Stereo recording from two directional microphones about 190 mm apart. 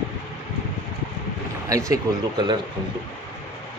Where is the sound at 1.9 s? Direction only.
20° right (ahead or behind).